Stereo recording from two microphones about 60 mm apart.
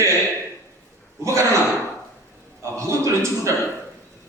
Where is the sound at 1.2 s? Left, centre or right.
Right.